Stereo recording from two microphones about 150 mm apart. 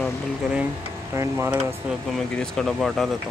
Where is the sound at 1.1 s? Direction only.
20° right (ahead or behind).